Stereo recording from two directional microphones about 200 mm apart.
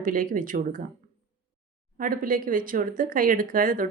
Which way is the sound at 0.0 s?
45° right (ahead or behind).